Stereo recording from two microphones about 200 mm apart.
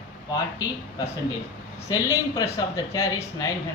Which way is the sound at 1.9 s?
15° left (ahead or behind).